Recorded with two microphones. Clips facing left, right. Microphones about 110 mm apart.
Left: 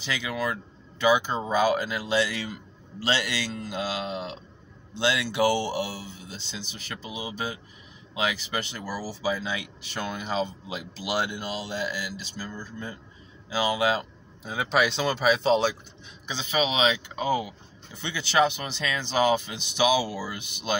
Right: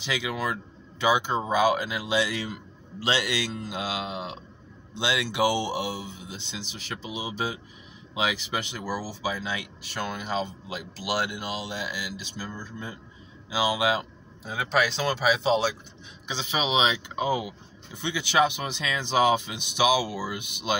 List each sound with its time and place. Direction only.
0.0 s speech: 15° right (ahead or behind)
14.5 s speech: 5° left (ahead or behind)
16.3 s speech: 20° right (ahead or behind)